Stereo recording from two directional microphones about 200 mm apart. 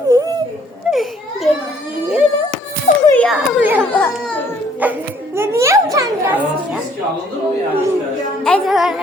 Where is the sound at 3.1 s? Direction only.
Centre (ahead or behind).